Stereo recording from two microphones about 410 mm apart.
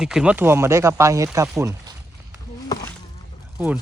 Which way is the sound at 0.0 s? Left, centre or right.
Centre.